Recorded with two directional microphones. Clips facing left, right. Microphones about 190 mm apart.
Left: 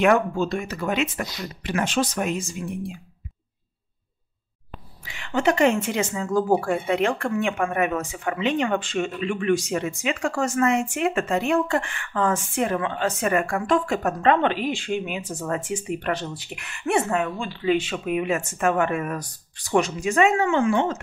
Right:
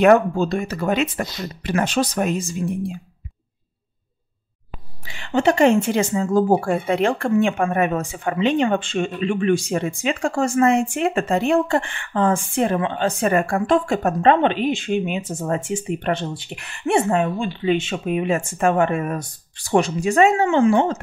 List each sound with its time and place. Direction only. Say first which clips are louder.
0.0 s speech: right 5 dB; 40° right (ahead or behind)
5.0 s a woman's voice: right 4 dB; 30° right (ahead or behind)